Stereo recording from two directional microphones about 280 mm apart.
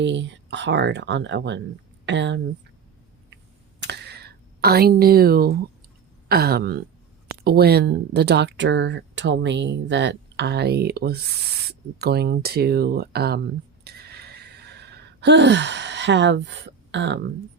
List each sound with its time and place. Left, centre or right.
0.0 s speech: right
3.8 s a sound: right
6.2 s speech: right
13.8 s gasp: right